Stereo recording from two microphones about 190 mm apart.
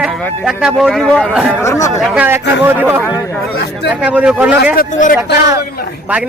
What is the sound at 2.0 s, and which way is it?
Speech, 5° right (ahead or behind).